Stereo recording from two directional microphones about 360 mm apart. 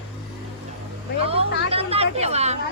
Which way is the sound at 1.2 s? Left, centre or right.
Centre.